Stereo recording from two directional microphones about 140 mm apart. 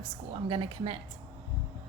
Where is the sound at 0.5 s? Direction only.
40° right (ahead or behind).